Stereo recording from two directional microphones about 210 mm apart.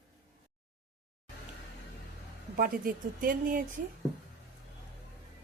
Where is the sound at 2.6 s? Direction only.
45° right (ahead or behind).